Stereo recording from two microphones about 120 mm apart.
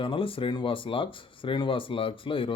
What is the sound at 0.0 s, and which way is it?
A man's voice, 45° left (ahead or behind).